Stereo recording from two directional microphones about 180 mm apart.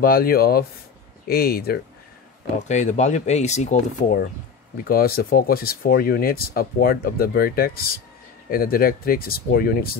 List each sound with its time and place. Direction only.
0.0 s speech: 55° left (ahead or behind)
2.7 s speech: 40° left (ahead or behind)
4.8 s speech: 55° left (ahead or behind)